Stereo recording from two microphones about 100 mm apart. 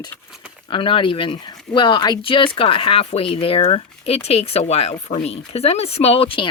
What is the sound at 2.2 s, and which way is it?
Speech, 60° left (ahead or behind).